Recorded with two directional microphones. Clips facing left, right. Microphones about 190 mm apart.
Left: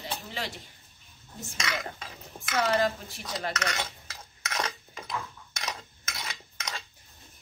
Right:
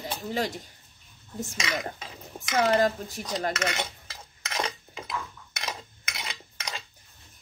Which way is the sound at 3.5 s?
15° right (ahead or behind).